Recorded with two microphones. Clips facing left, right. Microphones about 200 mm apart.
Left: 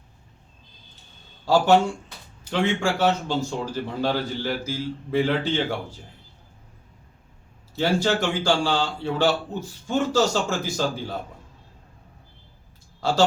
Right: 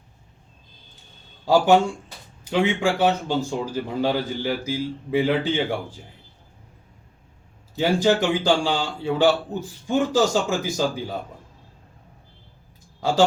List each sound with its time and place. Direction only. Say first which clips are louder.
1.5 s speech: right 1 dB; 15° right (ahead or behind)
7.8 s speech: right 3 dB; 15° right (ahead or behind)
13.0 s speech: right 2 dB; 15° right (ahead or behind)